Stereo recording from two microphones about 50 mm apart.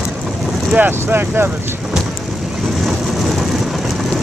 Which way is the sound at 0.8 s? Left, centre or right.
Right.